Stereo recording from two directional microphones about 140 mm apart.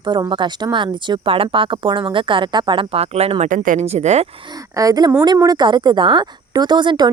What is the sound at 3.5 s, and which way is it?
Speech, 70° right (ahead or behind).